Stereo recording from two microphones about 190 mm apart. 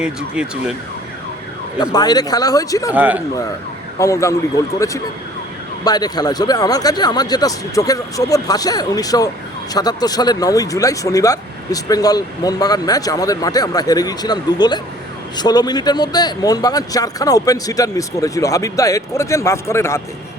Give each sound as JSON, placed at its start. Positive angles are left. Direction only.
{"t": 0.0, "sound": "emergency vehicle", "side_deg": -5}
{"t": 1.8, "sound": "speech", "side_deg": 20}
{"t": 2.9, "sound": "a man's voice", "side_deg": -10}
{"t": 3.9, "sound": "speech", "side_deg": 15}